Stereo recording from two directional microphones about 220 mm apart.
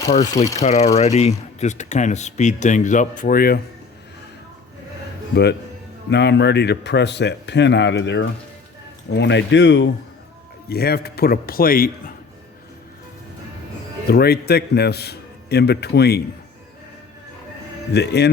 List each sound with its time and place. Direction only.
0.2 s speech: 15° left (ahead or behind)
0.6 s speech: 30° left (ahead or behind)
5.3 s speech: 50° left (ahead or behind)
14.1 s speech: 45° left (ahead or behind)
17.9 s speech: 50° left (ahead or behind)